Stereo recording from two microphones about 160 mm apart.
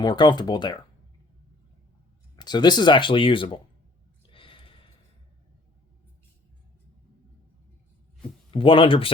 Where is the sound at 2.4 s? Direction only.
25° left (ahead or behind).